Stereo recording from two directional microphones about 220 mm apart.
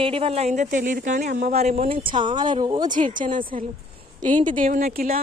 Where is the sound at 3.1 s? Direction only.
35° right (ahead or behind).